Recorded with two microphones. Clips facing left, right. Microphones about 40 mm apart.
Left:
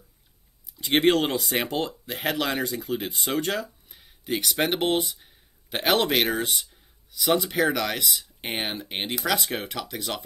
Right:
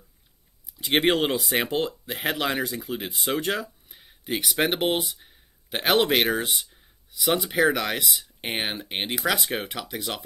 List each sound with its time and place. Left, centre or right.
0.7 s speech: centre